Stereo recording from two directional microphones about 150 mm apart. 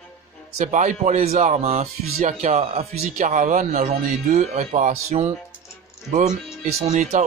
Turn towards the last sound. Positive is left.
turn(degrees=-55)  # may be behind; listen again after turning